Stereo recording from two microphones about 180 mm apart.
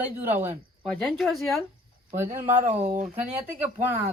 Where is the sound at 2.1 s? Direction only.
45° right (ahead or behind).